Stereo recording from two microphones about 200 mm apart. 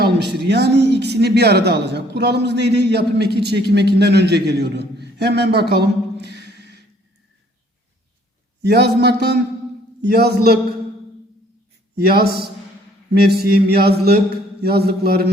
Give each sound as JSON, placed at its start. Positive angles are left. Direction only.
{"t": 0.0, "sound": "speech", "side_deg": -55}
{"t": 8.6, "sound": "speech", "side_deg": -55}
{"t": 10.0, "sound": "mantra", "side_deg": -50}
{"t": 11.9, "sound": "mantra", "side_deg": -50}